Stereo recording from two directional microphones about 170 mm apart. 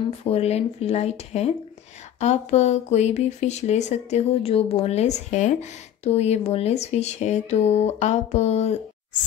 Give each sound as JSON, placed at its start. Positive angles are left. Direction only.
{"t": 0.2, "sound": "speech", "side_deg": 35}